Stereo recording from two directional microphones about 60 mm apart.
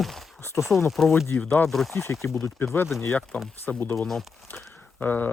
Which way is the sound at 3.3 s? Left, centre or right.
Centre.